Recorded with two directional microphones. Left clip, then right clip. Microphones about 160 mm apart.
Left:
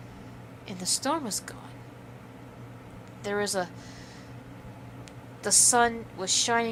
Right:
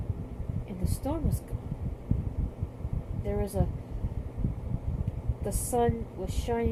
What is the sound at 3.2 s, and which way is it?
Speech, 70° left (ahead or behind).